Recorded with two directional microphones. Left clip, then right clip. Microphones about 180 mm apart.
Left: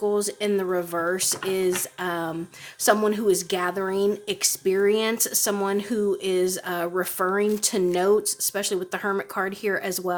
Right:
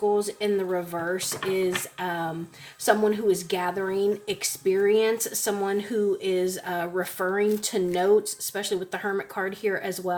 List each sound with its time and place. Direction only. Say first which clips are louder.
0.1 s speech: even; 45° left (ahead or behind)